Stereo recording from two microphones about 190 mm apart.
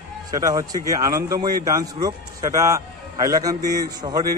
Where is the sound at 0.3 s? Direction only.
20° right (ahead or behind).